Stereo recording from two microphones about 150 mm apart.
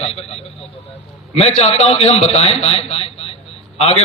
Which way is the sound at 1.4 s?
45° left (ahead or behind).